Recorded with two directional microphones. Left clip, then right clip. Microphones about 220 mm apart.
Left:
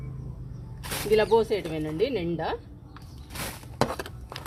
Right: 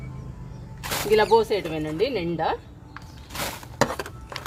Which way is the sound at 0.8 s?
Centre (ahead or behind).